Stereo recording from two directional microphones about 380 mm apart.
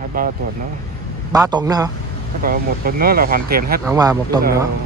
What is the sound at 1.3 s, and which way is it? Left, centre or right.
Speech, centre.